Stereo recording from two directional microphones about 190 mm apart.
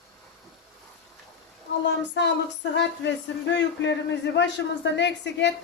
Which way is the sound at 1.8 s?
65° left (ahead or behind).